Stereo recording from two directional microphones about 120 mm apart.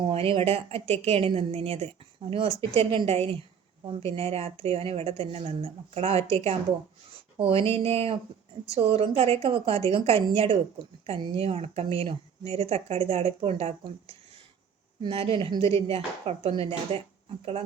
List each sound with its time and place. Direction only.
0.0 s a woman's voice: 50° right (ahead or behind)
15.1 s a woman's voice: 50° right (ahead or behind)